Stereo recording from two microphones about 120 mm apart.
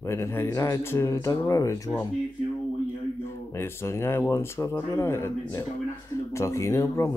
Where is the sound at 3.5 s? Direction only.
20° left (ahead or behind).